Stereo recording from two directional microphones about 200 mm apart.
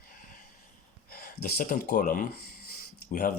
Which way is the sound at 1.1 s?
45° left (ahead or behind).